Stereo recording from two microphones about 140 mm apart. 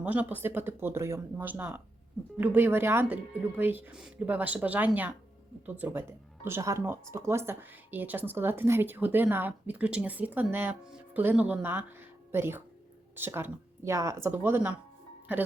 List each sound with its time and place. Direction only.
0.0 s speech: 10° right (ahead or behind)